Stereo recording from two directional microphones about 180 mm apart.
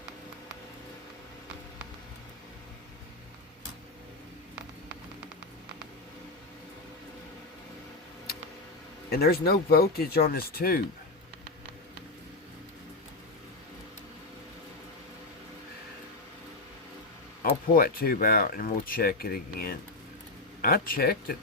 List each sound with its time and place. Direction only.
9.0 s speech: 60° left (ahead or behind)
17.5 s speech: 55° left (ahead or behind)